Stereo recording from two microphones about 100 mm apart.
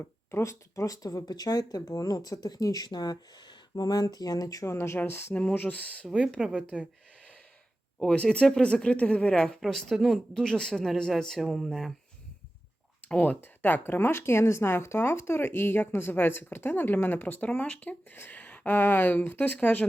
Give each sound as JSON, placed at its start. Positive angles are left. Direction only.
{"t": 0.3, "sound": "speech", "side_deg": 30}
{"t": 6.1, "sound": "speech", "side_deg": -5}
{"t": 7.9, "sound": "speech", "side_deg": 10}
{"t": 13.1, "sound": "speech", "side_deg": 15}